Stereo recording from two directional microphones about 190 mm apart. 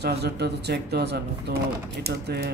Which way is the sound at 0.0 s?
60° right (ahead or behind).